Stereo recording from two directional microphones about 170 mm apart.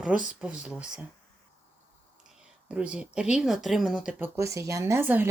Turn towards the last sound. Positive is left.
turn(degrees=-10)  # may be behind; listen again after turning